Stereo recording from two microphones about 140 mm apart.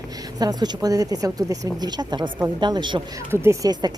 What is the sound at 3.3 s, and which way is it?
Speech, 20° right (ahead or behind).